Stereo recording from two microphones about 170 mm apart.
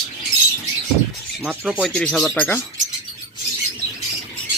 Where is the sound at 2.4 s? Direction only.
10° left (ahead or behind).